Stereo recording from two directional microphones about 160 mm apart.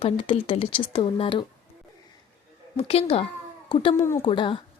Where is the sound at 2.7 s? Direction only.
40° left (ahead or behind).